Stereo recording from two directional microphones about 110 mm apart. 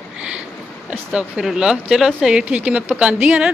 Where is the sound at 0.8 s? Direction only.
10° right (ahead or behind).